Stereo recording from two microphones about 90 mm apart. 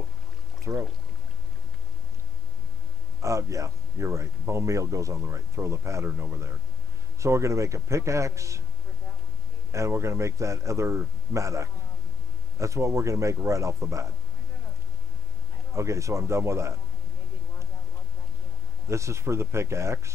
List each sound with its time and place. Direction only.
0.7 s speech: 25° right (ahead or behind)
3.2 s speech: 35° right (ahead or behind)
9.7 s speech: 30° right (ahead or behind)
15.7 s speech: 35° right (ahead or behind)
18.9 s speech: 30° right (ahead or behind)